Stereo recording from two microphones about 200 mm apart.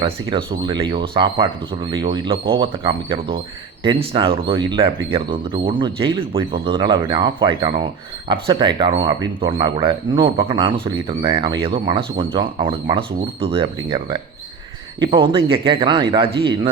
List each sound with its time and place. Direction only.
0.0 s speech: 25° right (ahead or behind)